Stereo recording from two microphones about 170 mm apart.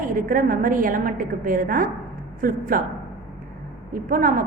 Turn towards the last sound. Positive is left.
turn(degrees=-55)  # may be behind; listen again after turning